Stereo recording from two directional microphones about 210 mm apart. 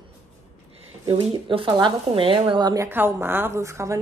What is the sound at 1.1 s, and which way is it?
A woman's voice, 25° right (ahead or behind).